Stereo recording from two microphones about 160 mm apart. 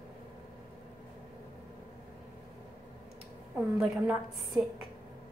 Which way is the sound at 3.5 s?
Centre (ahead or behind).